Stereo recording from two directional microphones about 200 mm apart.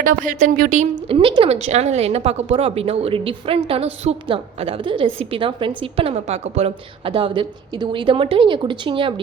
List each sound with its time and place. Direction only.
0.0 s a woman's voice: 45° right (ahead or behind); by 9.1 s 25° right (ahead or behind)